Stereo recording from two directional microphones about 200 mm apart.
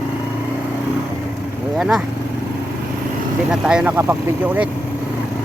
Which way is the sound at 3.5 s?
5° right (ahead or behind).